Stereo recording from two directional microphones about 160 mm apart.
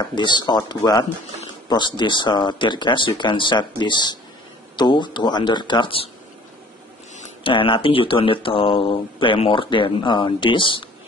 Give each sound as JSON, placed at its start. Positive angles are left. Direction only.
{"t": 0.0, "sound": "speech", "side_deg": 30}
{"t": 7.4, "sound": "speech", "side_deg": 30}